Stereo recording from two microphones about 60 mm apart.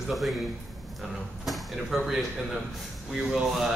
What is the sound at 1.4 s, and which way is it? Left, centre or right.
Speech, centre.